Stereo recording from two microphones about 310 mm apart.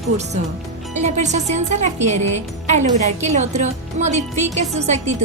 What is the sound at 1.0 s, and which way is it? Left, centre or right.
Speech, right.